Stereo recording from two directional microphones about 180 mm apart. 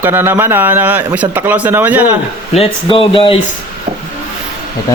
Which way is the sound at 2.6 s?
30° left (ahead or behind).